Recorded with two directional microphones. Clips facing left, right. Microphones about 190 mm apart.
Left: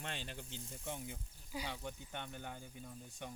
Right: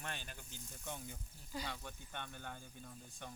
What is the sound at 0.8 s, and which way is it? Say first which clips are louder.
Speech: left 2 dB; 10° left (ahead or behind).